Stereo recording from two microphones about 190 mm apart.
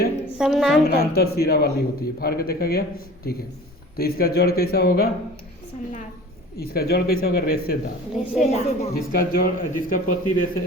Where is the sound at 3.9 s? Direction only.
55° left (ahead or behind).